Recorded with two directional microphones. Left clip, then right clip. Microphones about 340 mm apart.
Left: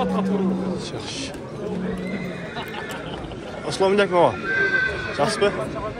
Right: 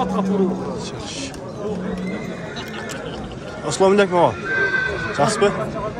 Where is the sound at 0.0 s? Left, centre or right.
Right.